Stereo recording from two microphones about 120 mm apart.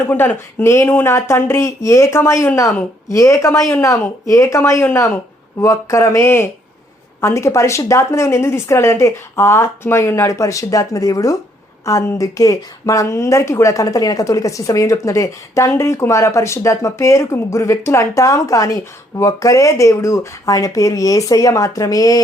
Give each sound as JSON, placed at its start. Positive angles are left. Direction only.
{"t": 0.1, "sound": "speech", "side_deg": 15}